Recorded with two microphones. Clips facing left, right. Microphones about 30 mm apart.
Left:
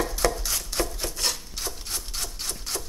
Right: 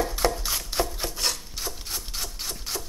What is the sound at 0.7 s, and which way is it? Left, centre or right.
Rub, right.